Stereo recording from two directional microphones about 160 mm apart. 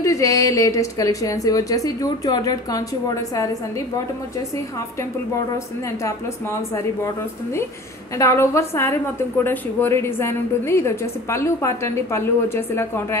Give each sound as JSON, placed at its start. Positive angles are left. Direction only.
{"t": 0.0, "sound": "a woman's voice", "side_deg": 20}
{"t": 8.2, "sound": "a woman's voice", "side_deg": 15}